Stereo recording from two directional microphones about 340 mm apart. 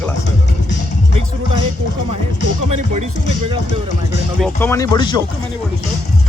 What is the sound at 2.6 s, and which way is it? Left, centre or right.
Speech, right.